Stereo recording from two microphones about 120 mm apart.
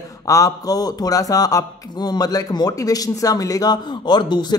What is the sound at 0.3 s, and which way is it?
Speech, 30° left (ahead or behind).